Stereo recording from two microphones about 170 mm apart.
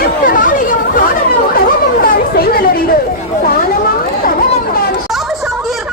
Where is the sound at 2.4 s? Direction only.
60° left (ahead or behind).